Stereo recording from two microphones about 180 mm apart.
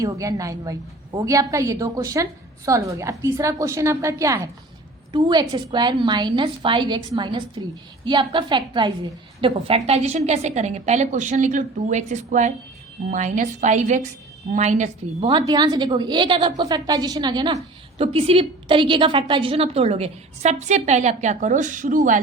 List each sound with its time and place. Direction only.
0.0 s a woman's voice: 20° right (ahead or behind); by 15.3 s 40° right (ahead or behind)
15.3 s a woman's voice: 25° right (ahead or behind); by 22.2 s 45° right (ahead or behind)